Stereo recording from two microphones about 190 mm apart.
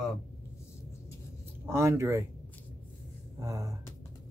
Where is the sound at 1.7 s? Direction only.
15° right (ahead or behind).